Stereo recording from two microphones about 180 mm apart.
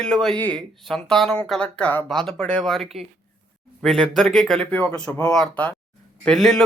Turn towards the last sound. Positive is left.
turn(degrees=0)  # may be behind; listen again after turning